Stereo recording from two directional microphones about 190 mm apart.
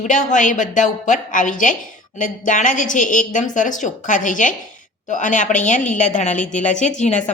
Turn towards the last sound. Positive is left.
turn(degrees=40)  # may be behind; listen again after turning